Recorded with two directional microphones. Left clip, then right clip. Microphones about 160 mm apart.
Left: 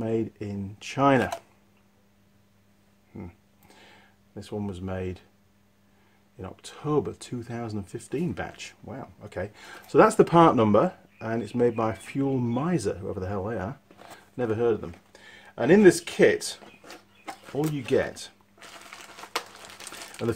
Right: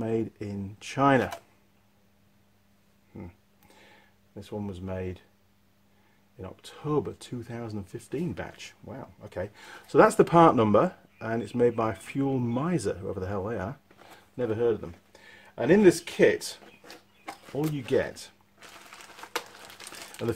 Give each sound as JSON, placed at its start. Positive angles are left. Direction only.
{"t": 0.0, "sound": "speech", "side_deg": -5}
{"t": 3.2, "sound": "a sound", "side_deg": 5}
{"t": 6.4, "sound": "speech", "side_deg": 5}